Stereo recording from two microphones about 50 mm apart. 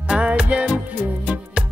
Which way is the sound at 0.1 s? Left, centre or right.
Right.